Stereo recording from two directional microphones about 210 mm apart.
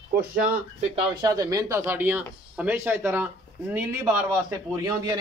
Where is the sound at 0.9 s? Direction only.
20° right (ahead or behind).